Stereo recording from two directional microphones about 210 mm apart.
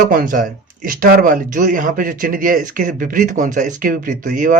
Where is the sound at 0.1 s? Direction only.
40° right (ahead or behind).